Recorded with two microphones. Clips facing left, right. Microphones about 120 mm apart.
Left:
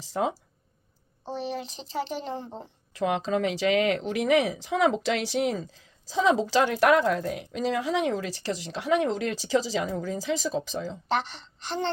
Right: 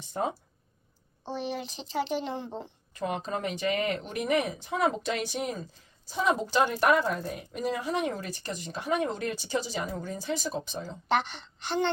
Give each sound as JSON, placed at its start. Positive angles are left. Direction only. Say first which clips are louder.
{"t": 0.0, "sound": "speech", "louder": "left 3 dB", "side_deg": 90}
{"t": 1.3, "sound": "speech", "louder": "left 1 dB", "side_deg": 35}
{"t": 2.9, "sound": "speech", "louder": "left 6 dB", "side_deg": 85}
{"t": 11.1, "sound": "speech", "louder": "right 1 dB", "side_deg": 35}